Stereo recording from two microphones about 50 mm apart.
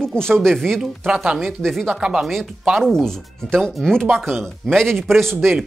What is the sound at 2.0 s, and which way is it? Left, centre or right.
Speech, centre.